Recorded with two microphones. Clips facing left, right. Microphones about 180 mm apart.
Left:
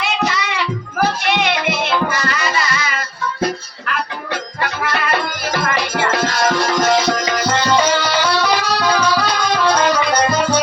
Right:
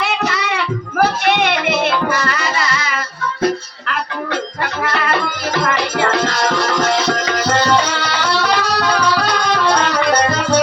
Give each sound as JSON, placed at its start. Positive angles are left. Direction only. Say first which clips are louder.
{"t": 0.0, "sound": "music", "louder": "right 1 dB", "side_deg": -60}
{"t": 9.1, "sound": "music", "louder": "even", "side_deg": -65}